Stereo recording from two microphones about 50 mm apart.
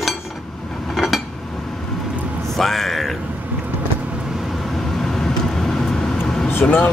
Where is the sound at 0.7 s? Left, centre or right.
Centre.